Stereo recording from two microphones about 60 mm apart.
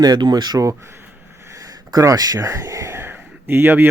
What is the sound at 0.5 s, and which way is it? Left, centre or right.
Speech, right.